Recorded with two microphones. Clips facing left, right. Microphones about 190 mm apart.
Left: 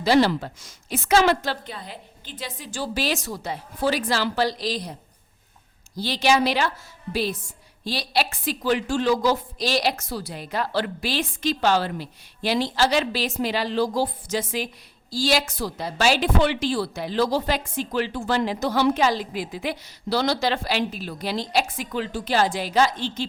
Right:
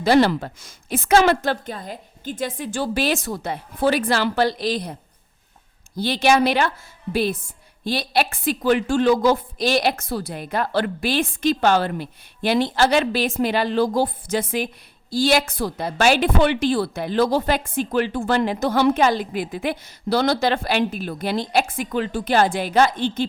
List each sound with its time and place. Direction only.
0.0 s a woman's voice: 55° right (ahead or behind)
6.0 s a woman's voice: 55° right (ahead or behind)